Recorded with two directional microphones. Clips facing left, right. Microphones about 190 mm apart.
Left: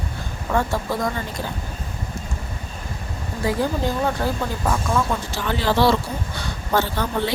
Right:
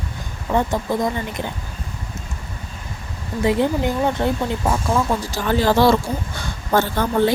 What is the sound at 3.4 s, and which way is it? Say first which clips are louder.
Speech: right 4 dB; 25° right (ahead or behind).